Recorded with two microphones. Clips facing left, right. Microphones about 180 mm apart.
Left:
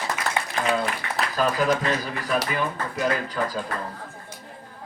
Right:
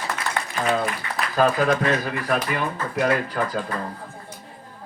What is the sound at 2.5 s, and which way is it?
Speech, 70° right (ahead or behind).